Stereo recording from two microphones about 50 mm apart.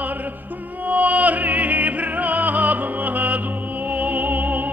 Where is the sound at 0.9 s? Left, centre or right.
Right.